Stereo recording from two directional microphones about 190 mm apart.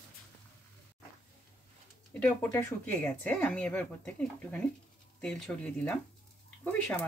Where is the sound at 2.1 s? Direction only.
10° left (ahead or behind).